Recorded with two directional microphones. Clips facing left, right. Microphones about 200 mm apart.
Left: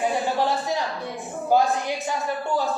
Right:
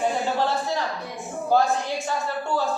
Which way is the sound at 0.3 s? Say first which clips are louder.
Left 1 dB; 15° left (ahead or behind).